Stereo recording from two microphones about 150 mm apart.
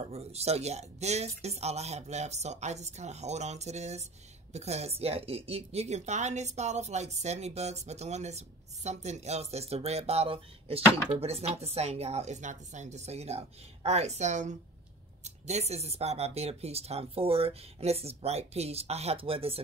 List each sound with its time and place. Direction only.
0.1 s speech: 45° right (ahead or behind)